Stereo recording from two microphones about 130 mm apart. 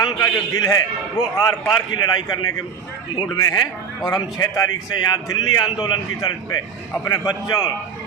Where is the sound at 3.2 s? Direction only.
30° left (ahead or behind).